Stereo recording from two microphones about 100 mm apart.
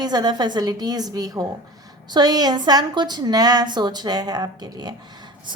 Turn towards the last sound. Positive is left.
turn(degrees=-45)  # may be behind; listen again after turning